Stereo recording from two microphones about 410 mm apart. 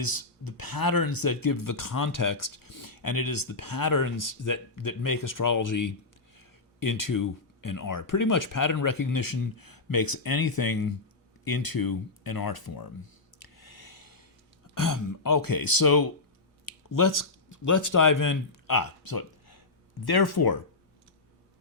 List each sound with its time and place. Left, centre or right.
0.0 s speech: left
11.4 s a sound: left
14.8 s speech: left